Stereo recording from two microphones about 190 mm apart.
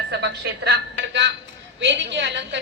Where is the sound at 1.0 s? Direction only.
70° right (ahead or behind).